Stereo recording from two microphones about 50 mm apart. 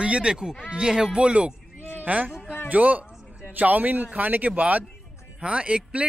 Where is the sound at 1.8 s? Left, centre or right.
Left.